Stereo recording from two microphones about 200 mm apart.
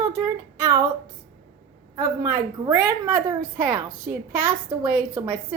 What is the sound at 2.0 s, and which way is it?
A woman's voice, 15° right (ahead or behind).